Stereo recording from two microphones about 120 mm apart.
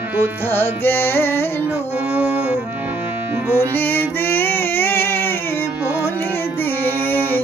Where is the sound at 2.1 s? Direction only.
10° right (ahead or behind).